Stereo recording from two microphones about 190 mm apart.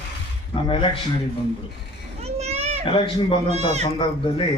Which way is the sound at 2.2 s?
35° right (ahead or behind).